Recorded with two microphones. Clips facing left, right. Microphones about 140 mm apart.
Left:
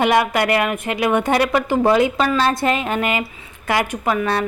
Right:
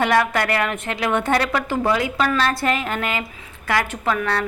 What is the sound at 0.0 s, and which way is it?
A woman's voice, 15° left (ahead or behind).